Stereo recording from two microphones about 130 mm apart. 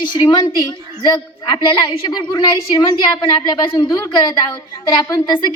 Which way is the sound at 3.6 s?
25° left (ahead or behind).